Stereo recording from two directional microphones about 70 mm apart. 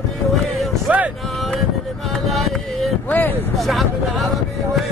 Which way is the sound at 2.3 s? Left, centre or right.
Centre.